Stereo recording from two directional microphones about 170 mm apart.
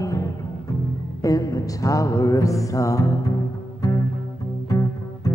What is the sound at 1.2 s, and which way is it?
Music, 20° left (ahead or behind).